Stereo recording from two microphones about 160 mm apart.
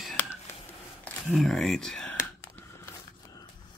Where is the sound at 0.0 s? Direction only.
5° left (ahead or behind).